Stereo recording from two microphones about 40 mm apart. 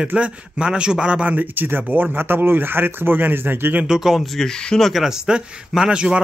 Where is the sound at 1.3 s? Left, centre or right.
Right.